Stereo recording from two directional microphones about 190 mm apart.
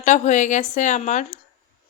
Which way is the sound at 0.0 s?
40° left (ahead or behind).